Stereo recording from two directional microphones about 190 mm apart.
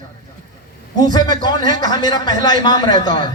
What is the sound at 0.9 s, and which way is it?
A man's voice, 20° left (ahead or behind).